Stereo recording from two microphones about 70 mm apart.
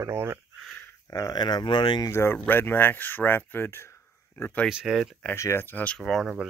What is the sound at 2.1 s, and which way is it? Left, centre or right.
Speech, left.